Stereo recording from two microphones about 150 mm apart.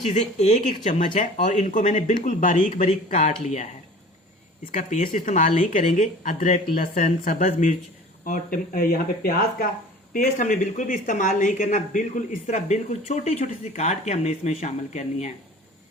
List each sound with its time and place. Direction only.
0.1 s speech: 50° left (ahead or behind)
0.7 s speech: 60° left (ahead or behind)
4.7 s speech: 55° left (ahead or behind); by 9.6 s 75° left (ahead or behind)
10.1 s speech: 60° left (ahead or behind)